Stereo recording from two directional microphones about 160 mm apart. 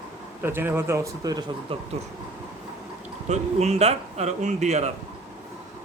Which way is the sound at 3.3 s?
45° right (ahead or behind).